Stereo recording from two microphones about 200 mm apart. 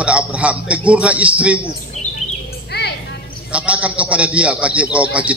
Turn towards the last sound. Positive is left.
turn(degrees=-5)  # may be behind; listen again after turning